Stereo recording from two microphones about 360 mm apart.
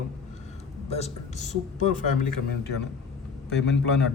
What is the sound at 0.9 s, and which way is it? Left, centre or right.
A man's voice, centre.